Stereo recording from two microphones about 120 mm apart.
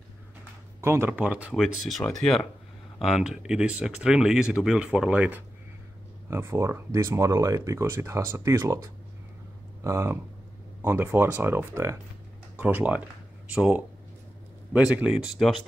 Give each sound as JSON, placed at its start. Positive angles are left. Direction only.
{"t": 0.7, "sound": "speech", "side_deg": -20}
{"t": 1.5, "sound": "speech", "side_deg": 0}
{"t": 6.3, "sound": "speech", "side_deg": -25}